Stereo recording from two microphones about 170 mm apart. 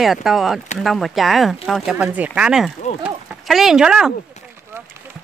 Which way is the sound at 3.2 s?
Centre (ahead or behind).